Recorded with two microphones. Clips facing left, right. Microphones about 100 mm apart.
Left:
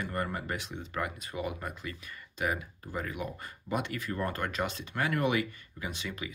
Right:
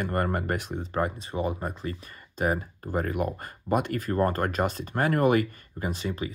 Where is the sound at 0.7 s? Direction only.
35° right (ahead or behind).